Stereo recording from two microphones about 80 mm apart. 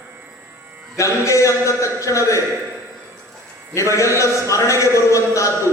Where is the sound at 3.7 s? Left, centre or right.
Left.